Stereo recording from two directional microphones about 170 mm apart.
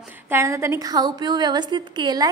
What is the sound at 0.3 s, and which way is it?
A woman's voice, 15° right (ahead or behind).